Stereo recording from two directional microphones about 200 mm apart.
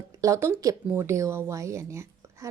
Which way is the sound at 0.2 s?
15° right (ahead or behind).